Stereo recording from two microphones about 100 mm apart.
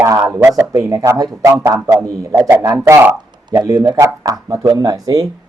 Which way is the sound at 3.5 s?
35° right (ahead or behind).